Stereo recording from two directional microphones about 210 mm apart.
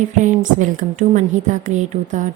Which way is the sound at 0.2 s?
35° right (ahead or behind).